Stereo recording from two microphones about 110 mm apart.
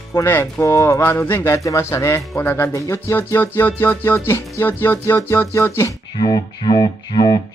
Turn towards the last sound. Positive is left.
turn(degrees=35)  # may be behind; listen again after turning